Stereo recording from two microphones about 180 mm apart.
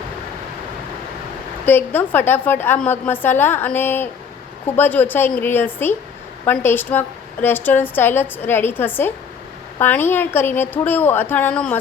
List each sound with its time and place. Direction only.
1.6 s a woman's voice: 10° left (ahead or behind)